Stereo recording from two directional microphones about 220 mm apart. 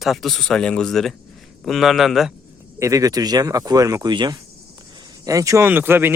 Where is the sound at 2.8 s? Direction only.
15° right (ahead or behind).